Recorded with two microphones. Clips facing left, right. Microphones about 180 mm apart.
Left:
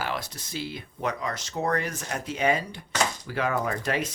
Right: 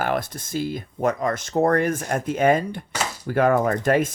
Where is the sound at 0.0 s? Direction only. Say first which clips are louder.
Right 8 dB; 50° right (ahead or behind).